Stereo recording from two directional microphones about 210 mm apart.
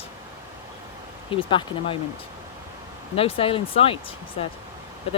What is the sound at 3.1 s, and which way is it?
Speech, 25° left (ahead or behind).